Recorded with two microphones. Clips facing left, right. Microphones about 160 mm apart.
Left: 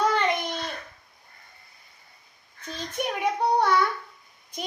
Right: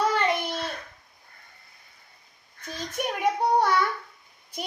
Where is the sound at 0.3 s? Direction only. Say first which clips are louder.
Right 1 dB; 10° right (ahead or behind).